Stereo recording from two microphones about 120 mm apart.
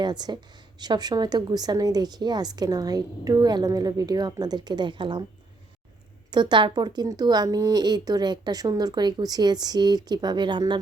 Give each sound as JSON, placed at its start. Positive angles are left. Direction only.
{"t": 0.0, "sound": "speech", "side_deg": -35}
{"t": 6.3, "sound": "speech", "side_deg": -40}